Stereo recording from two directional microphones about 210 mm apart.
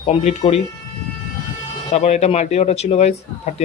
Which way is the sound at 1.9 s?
30° left (ahead or behind).